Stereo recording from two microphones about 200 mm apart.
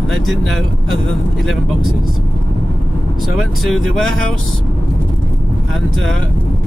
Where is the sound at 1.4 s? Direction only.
Centre (ahead or behind).